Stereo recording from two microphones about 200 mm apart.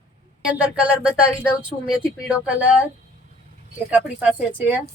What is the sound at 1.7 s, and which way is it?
Speech, 30° left (ahead or behind).